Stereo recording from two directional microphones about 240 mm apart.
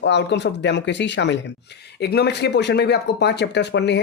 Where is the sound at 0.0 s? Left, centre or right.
Left.